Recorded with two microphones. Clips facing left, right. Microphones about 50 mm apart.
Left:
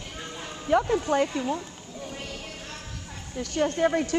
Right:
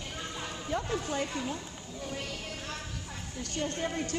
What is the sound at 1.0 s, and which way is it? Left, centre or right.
Speech, left.